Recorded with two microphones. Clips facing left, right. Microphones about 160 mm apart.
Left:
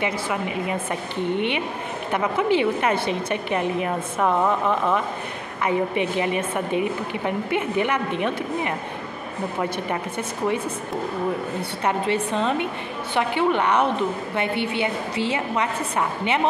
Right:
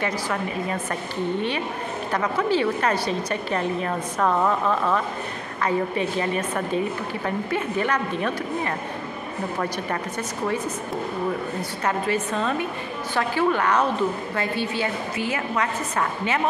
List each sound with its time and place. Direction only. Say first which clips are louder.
0.0 s a woman's voice: left 1 dB; 15° left (ahead or behind)
2.1 s a woman's voice: left 2 dB; 15° left (ahead or behind)
11.8 s a woman's voice: left 2 dB; 20° left (ahead or behind)